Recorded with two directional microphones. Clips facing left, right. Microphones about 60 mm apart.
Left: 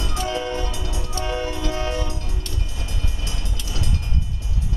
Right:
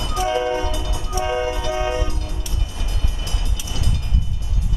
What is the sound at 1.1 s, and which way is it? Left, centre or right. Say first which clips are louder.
Music: right 5 dB; centre.